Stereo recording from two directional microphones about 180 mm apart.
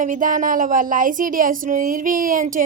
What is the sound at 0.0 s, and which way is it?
Speech, 50° right (ahead or behind).